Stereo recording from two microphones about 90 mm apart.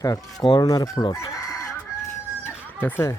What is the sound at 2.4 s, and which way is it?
Chicken, 20° left (ahead or behind).